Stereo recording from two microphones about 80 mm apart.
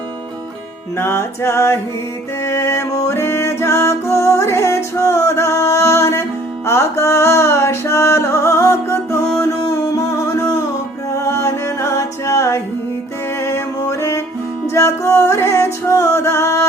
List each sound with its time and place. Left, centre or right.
0.9 s music: left